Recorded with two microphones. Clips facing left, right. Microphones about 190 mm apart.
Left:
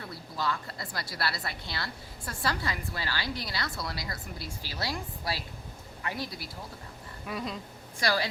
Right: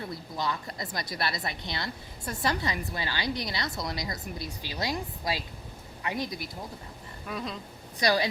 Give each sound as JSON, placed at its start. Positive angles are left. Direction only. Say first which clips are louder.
{"t": 0.0, "sound": "a woman's voice", "louder": "right 1 dB", "side_deg": -20}
{"t": 7.3, "sound": "a sound", "louder": "even", "side_deg": 5}
{"t": 7.9, "sound": "a woman's voice", "louder": "right 3 dB", "side_deg": -20}